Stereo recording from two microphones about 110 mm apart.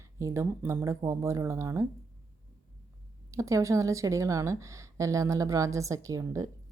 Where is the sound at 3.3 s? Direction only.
30° right (ahead or behind).